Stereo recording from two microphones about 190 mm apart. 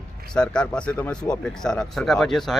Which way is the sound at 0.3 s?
5° left (ahead or behind).